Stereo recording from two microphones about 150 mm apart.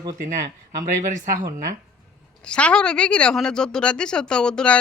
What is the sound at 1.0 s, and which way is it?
Speech, 55° right (ahead or behind).